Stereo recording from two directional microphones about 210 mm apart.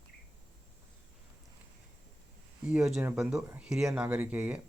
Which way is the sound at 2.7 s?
5° right (ahead or behind).